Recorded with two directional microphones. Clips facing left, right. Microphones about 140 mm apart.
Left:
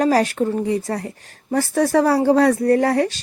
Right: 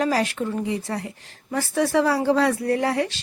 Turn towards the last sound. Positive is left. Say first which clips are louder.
# left 6 dB
turn(degrees=45)  # may be behind; listen again after turning